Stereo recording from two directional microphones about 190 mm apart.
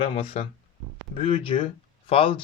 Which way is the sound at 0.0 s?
30° left (ahead or behind).